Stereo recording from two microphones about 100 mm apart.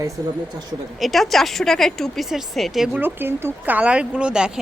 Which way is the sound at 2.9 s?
20° right (ahead or behind).